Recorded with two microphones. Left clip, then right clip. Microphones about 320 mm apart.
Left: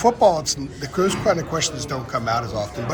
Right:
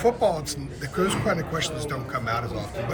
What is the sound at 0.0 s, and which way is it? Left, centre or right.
A man's voice, centre.